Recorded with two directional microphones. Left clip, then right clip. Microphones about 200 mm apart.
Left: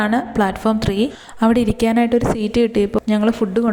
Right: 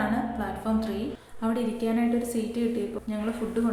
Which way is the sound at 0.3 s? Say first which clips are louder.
Left 12 dB; 45° left (ahead or behind).